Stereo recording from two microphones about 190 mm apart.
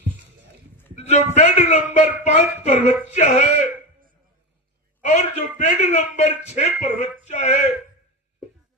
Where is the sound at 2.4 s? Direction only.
40° left (ahead or behind).